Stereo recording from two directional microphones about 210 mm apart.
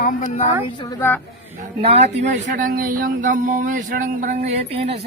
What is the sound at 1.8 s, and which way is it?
Speech, 30° right (ahead or behind).